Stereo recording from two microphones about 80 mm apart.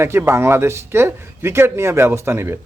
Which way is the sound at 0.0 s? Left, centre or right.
Right.